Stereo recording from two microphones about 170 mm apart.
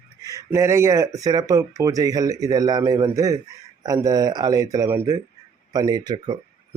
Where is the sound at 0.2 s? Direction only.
20° right (ahead or behind).